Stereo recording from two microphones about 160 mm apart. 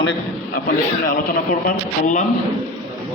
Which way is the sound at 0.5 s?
60° left (ahead or behind).